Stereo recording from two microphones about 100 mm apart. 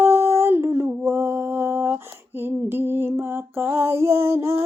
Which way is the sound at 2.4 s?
20° right (ahead or behind).